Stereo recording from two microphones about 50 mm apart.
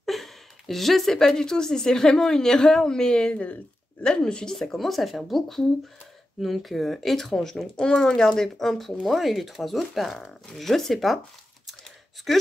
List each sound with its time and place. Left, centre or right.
0.0 s a woman's voice: centre
4.6 s speech: centre
12.3 s speech: centre